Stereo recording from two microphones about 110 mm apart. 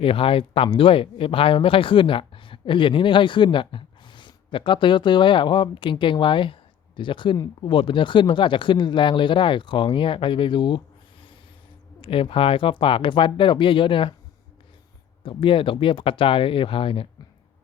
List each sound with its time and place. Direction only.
0.0 s speech: 55° left (ahead or behind)
11.9 s speech: 55° left (ahead or behind)
15.2 s speech: 50° left (ahead or behind)